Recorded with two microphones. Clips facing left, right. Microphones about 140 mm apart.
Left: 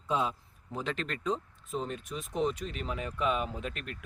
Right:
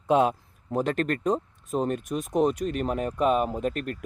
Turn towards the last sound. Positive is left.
turn(degrees=-45)  # may be behind; listen again after turning